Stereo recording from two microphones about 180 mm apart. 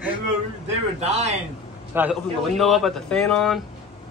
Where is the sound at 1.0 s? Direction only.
40° right (ahead or behind).